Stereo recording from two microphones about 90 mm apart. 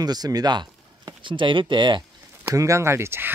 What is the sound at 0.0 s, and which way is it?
Speech, 45° right (ahead or behind).